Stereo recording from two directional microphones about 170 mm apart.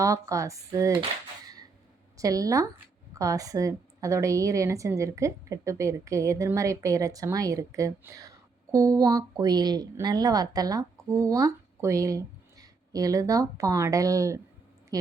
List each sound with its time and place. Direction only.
0.0 s a woman's voice: 20° right (ahead or behind)
2.1 s a woman's voice: 20° right (ahead or behind)